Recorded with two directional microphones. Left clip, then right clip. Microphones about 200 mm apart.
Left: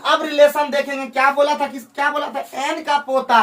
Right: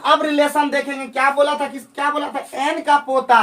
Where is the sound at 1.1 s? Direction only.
15° right (ahead or behind).